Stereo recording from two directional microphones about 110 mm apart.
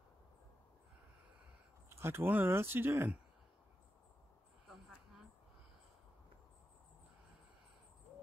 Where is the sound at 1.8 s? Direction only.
25° right (ahead or behind).